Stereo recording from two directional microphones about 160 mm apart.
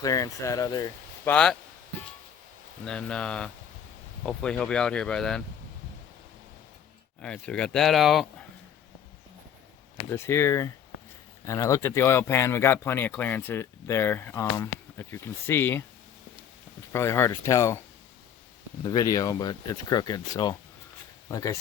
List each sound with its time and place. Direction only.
0.0 s speech: 20° left (ahead or behind)
1.3 s speech: 5° left (ahead or behind)
2.8 s speech: 5° left (ahead or behind)
7.2 s speech: 5° left (ahead or behind)
10.1 s speech: 15° left (ahead or behind)
16.9 s speech: 15° left (ahead or behind)